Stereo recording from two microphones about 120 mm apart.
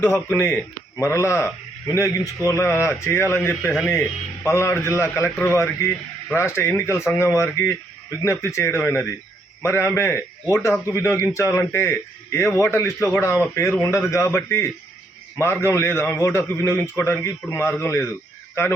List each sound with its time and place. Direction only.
0.0 s speech: 20° left (ahead or behind)